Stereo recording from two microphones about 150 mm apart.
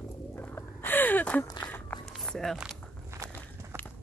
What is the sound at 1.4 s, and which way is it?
Speech, 25° left (ahead or behind).